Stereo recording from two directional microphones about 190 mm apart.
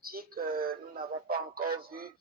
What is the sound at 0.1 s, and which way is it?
A woman's voice, 50° right (ahead or behind).